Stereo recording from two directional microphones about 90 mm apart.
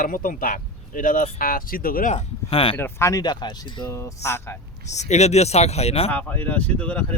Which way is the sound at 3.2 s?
55° left (ahead or behind).